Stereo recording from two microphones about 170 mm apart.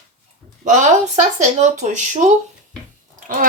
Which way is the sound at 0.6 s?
45° right (ahead or behind).